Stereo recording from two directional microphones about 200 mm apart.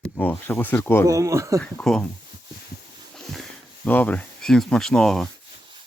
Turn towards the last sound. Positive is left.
turn(degrees=5)  # may be behind; listen again after turning